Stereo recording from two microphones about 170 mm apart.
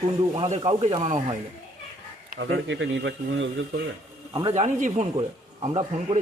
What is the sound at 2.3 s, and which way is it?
Speech, 90° right.